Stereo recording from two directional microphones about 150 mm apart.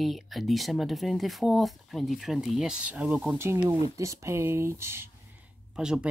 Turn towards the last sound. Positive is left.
turn(degrees=-5)  # may be behind; listen again after turning